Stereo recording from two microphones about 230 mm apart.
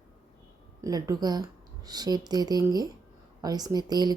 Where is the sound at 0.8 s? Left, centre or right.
Centre.